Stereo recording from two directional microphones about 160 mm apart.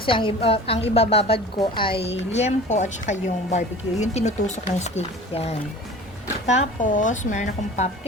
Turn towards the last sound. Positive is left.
turn(degrees=45)  # may be behind; listen again after turning